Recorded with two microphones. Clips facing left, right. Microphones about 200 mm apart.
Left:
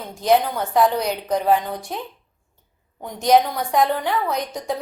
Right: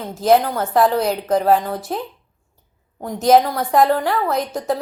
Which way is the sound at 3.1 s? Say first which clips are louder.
Right 3 dB; 5° right (ahead or behind).